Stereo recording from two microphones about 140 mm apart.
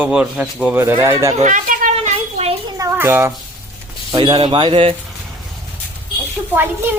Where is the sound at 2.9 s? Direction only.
15° right (ahead or behind).